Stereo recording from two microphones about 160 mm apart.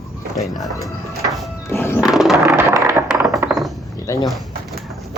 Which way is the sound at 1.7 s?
15° left (ahead or behind).